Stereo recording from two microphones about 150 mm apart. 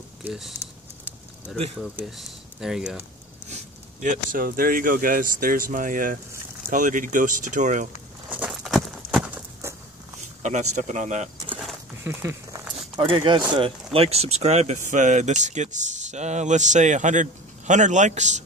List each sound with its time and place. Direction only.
0.2 s speech: 5° right (ahead or behind)
2.0 s speech: centre (ahead or behind)
3.4 s speech: 55° right (ahead or behind)
8.4 s clip-clop: centre (ahead or behind)
10.4 s speech: 55° right (ahead or behind)
12.0 s speech: 15° right (ahead or behind)
12.9 s speech: 35° right (ahead or behind)
13.9 s speech: 45° right (ahead or behind)